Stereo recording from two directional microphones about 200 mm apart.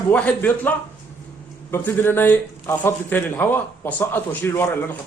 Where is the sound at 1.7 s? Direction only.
10° left (ahead or behind).